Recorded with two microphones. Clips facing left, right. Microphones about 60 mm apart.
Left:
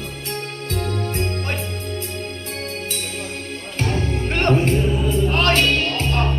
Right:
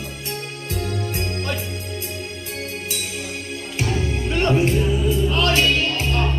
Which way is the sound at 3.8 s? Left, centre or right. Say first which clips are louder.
Left 1 dB; left.